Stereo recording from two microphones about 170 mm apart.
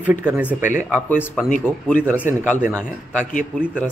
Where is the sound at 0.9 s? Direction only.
10° left (ahead or behind).